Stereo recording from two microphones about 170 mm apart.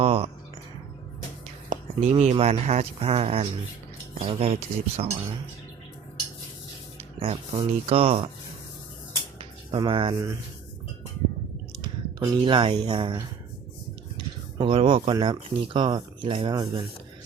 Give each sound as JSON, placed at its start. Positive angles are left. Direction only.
{"t": 0.0, "sound": "speech", "side_deg": -35}
{"t": 1.7, "sound": "speech", "side_deg": -35}
{"t": 7.2, "sound": "speech", "side_deg": -30}
{"t": 9.4, "sound": "a sound", "side_deg": -30}
{"t": 11.8, "sound": "speech", "side_deg": -25}
{"t": 14.6, "sound": "speech", "side_deg": -30}